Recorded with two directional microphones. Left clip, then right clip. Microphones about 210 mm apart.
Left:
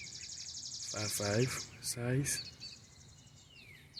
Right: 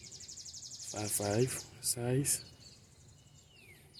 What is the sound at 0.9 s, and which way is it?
Speech, 15° right (ahead or behind).